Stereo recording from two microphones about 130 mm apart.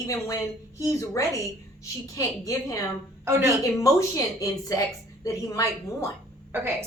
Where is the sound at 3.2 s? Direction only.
20° right (ahead or behind).